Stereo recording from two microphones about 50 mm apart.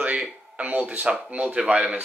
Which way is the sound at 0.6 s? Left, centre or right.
Right.